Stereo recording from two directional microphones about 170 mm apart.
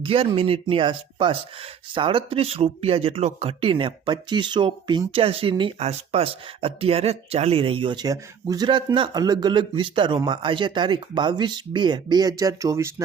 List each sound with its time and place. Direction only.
0.0 s speech: 35° right (ahead or behind); by 12.9 s 20° right (ahead or behind)